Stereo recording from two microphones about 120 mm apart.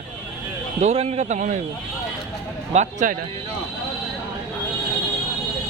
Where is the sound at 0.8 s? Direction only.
65° right (ahead or behind); by 1.5 s 85° right.